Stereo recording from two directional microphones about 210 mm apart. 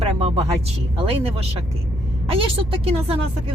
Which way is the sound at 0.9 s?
30° right (ahead or behind).